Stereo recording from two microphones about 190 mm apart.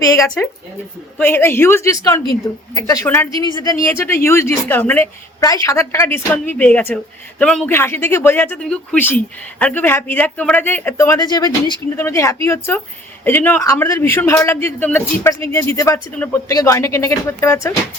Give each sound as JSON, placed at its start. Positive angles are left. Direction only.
{"t": 0.0, "sound": "speech", "side_deg": 15}